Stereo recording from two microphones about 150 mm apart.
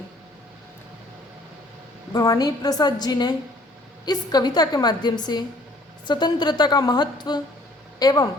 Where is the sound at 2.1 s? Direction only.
25° left (ahead or behind).